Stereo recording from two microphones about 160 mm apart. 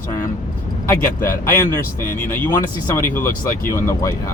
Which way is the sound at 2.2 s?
15° left (ahead or behind).